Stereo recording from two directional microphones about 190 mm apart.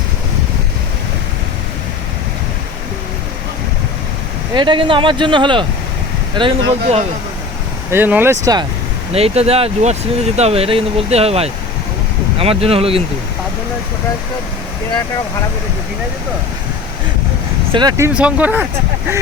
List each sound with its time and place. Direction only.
4.5 s speech: 25° right (ahead or behind)
7.9 s speech: 10° right (ahead or behind)
9.1 s speech: 30° right (ahead or behind)
17.7 s speech: 20° right (ahead or behind)